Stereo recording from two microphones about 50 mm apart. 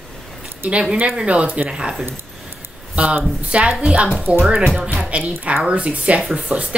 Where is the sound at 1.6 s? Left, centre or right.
Centre.